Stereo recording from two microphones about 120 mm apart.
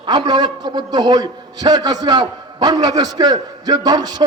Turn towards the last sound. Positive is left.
turn(degrees=-35)  # may be behind; listen again after turning